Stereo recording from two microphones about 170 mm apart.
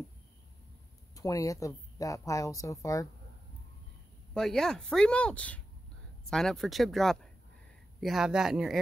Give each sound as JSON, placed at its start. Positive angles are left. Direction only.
{"t": 1.1, "sound": "a woman's voice", "side_deg": 20}
{"t": 4.3, "sound": "speech", "side_deg": 5}